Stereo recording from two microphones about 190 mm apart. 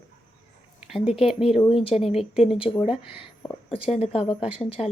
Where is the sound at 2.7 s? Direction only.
5° left (ahead or behind).